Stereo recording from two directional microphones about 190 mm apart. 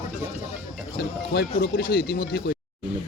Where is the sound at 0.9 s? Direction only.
55° left (ahead or behind).